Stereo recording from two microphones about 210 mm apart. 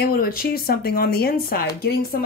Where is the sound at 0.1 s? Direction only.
45° left (ahead or behind).